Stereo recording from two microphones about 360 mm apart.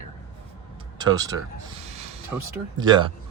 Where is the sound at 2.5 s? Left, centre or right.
Centre.